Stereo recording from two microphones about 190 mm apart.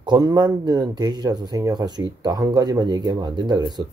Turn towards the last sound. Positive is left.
turn(degrees=-20)  # may be behind; listen again after turning